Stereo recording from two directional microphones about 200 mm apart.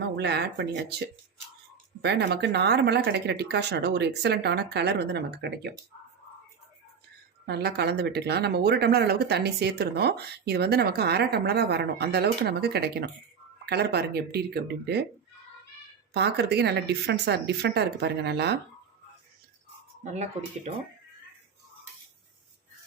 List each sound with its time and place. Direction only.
0.2 s speech: 55° right (ahead or behind)
7.4 s speech: 55° right (ahead or behind)
16.1 s speech: 55° right (ahead or behind)
20.1 s speech: 35° right (ahead or behind)